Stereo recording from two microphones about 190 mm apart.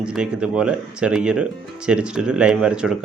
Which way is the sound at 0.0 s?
5° right (ahead or behind).